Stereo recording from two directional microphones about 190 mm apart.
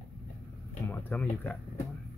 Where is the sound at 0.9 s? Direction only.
10° left (ahead or behind).